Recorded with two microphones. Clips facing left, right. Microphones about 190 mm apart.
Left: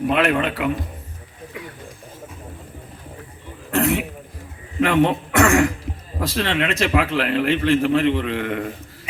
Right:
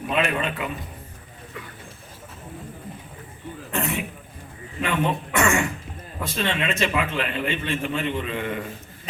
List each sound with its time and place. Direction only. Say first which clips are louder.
0.1 s a man's voice: left 3 dB; 75° left (ahead or behind)
3.7 s a sound: left 8 dB; 80° left
4.8 s speech: left 7 dB; 80° left